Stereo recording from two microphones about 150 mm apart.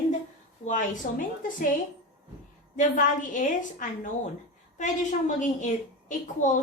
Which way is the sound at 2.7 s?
60° left (ahead or behind).